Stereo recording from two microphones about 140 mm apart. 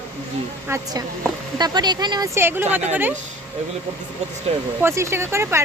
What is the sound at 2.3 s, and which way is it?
Speech, 15° right (ahead or behind).